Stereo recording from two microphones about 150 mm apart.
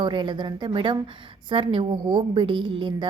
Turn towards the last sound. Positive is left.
turn(degrees=-35)  # may be behind; listen again after turning